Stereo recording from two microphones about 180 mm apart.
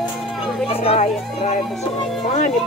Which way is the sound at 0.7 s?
35° left (ahead or behind).